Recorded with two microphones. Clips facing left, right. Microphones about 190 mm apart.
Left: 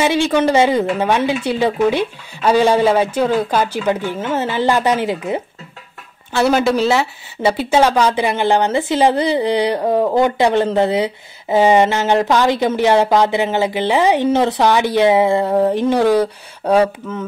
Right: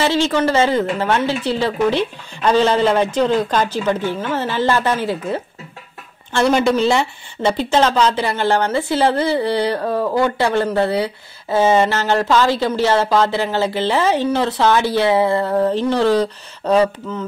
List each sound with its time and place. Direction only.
0.0 s speech: 15° left (ahead or behind)
6.3 s speech: 5° left (ahead or behind)